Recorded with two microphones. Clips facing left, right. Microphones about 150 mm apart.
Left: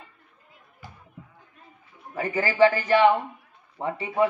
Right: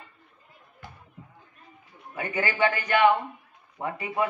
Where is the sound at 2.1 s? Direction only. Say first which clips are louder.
Left 6 dB; 35° left (ahead or behind).